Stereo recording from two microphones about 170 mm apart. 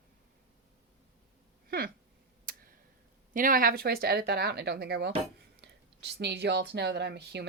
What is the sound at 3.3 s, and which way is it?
A woman's voice, 55° right (ahead or behind).